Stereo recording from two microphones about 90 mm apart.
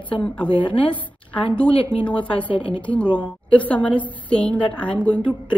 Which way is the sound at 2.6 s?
70° left (ahead or behind).